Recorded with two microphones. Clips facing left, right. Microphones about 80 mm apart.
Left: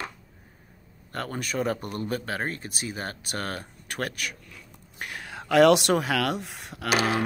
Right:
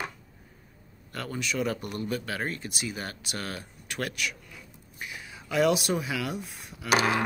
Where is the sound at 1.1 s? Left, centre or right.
Left.